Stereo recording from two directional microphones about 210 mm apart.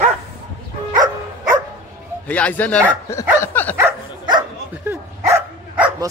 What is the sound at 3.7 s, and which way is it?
Dog, 15° right (ahead or behind).